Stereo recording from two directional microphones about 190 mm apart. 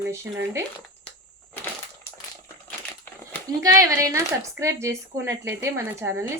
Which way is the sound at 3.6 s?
15° right (ahead or behind).